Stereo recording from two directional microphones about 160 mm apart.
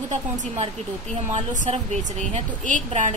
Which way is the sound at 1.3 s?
45° right (ahead or behind).